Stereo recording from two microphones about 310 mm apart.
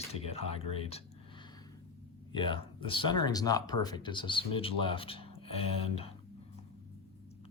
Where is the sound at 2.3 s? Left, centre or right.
Centre.